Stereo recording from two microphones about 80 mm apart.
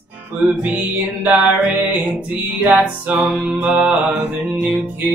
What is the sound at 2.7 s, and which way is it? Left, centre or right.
Music, centre.